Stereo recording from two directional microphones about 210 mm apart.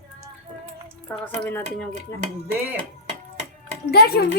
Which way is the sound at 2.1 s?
15° left (ahead or behind).